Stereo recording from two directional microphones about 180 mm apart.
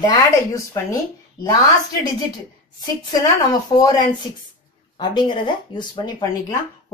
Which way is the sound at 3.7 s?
20° left (ahead or behind).